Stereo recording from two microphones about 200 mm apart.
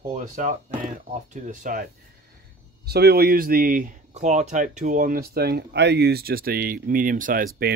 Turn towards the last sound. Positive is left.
turn(degrees=-50)  # may be behind; listen again after turning